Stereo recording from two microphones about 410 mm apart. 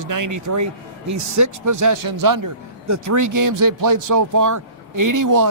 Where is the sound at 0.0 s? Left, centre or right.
Right.